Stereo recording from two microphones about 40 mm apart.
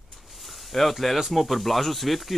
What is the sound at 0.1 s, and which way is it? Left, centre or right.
Speech, centre.